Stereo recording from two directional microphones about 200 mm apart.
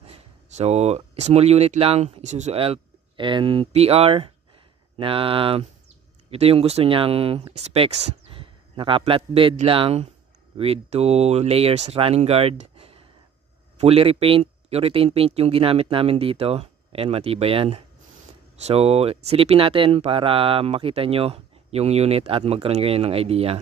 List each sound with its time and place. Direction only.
0.6 s speech: 30° right (ahead or behind)
12.7 s a sound: 30° right (ahead or behind)
13.7 s speech: 30° right (ahead or behind)